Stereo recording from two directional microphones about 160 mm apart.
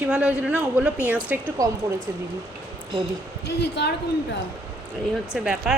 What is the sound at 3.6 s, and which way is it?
Speech, 90° left.